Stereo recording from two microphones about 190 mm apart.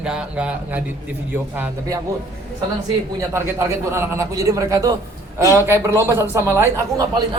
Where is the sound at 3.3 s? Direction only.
15° right (ahead or behind).